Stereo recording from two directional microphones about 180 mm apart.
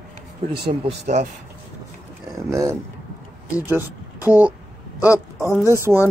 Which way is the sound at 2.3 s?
15° right (ahead or behind).